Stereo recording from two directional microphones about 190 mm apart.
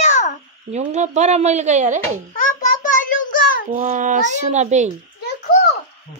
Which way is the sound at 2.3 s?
45° left (ahead or behind).